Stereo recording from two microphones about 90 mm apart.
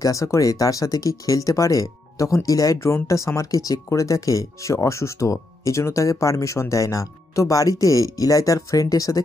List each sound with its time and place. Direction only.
0.0 s speech: 40° left (ahead or behind)